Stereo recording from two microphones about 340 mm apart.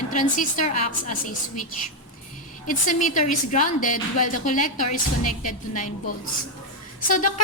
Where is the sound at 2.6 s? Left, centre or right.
Left.